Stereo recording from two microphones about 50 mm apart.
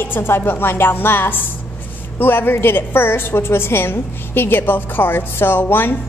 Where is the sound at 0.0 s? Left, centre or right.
Left.